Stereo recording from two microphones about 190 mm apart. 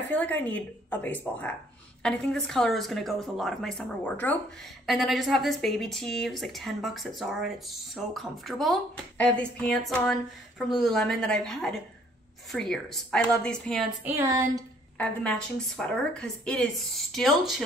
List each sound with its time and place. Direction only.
0.1 s a woman's voice: 10° left (ahead or behind)
14.0 s a sound: 15° right (ahead or behind)
15.0 s speech: 5° left (ahead or behind)